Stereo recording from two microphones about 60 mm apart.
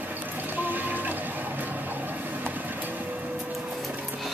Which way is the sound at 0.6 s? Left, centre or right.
Right.